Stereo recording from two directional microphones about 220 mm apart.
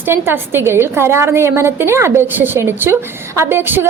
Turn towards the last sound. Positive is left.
turn(degrees=-10)  # may be behind; listen again after turning